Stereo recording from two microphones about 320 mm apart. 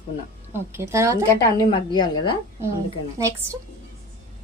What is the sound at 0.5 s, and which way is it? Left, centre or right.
Speech, centre.